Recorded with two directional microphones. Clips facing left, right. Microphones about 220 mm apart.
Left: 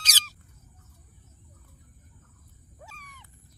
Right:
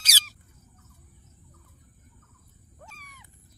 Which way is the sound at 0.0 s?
10° right (ahead or behind).